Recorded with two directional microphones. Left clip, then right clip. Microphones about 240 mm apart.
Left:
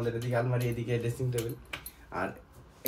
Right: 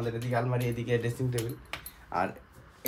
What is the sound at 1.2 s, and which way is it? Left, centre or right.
Speech, right.